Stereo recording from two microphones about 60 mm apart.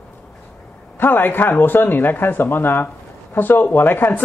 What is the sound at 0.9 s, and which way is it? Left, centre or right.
Speech, left.